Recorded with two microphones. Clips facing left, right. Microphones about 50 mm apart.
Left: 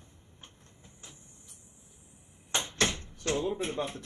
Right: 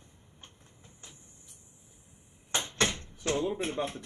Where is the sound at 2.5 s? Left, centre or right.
Centre.